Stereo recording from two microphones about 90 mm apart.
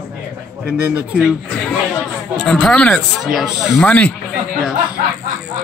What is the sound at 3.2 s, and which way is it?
Speech, 5° right (ahead or behind).